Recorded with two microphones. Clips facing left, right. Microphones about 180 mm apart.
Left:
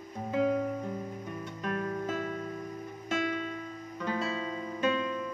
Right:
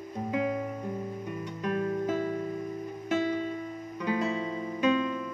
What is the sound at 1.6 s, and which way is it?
Music, 15° right (ahead or behind).